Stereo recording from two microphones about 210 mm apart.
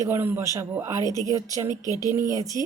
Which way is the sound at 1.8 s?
15° left (ahead or behind).